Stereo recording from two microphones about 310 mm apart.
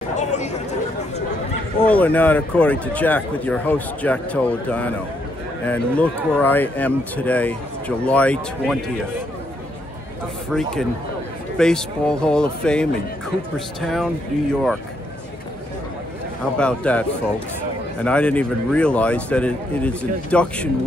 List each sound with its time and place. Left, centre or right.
0.1 s chatter: left
1.9 s speech: centre
10.5 s speech: centre
16.5 s speech: centre
18.0 s speech: centre